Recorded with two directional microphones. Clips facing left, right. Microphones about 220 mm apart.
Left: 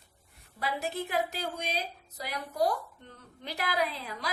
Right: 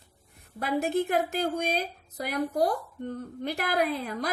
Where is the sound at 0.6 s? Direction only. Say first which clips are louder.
Right 7 dB; 50° right (ahead or behind).